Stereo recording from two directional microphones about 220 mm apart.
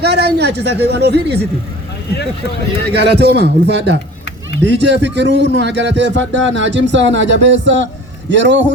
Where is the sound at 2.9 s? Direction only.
50° right (ahead or behind).